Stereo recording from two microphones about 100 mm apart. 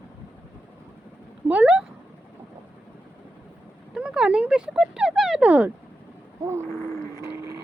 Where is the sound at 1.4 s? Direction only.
15° right (ahead or behind).